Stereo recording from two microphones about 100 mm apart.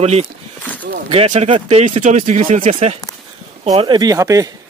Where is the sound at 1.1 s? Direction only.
75° right (ahead or behind).